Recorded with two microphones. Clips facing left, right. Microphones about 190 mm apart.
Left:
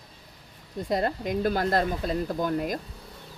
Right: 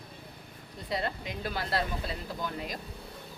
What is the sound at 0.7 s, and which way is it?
Speech, 50° left (ahead or behind).